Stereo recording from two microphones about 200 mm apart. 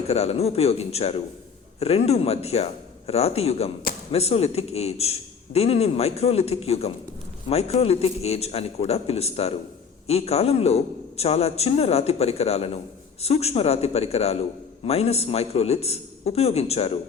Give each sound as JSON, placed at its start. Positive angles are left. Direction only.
{"t": 0.1, "sound": "a man's voice", "side_deg": 30}